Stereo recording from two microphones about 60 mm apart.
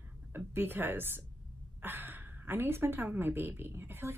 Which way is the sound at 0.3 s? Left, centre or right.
Right.